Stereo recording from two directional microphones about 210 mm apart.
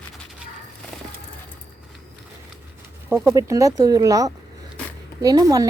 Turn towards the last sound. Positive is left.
turn(degrees=-15)  # may be behind; listen again after turning